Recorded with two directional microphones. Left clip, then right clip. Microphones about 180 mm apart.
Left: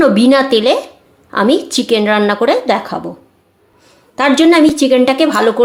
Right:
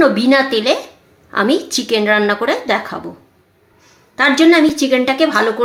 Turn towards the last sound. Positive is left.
turn(degrees=25)  # may be behind; listen again after turning